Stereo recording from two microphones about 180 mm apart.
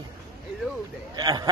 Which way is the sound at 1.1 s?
20° right (ahead or behind).